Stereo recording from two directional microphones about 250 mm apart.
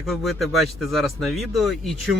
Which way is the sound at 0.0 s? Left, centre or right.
Centre.